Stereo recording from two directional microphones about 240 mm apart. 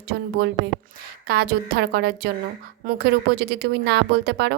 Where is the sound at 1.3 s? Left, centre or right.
Right.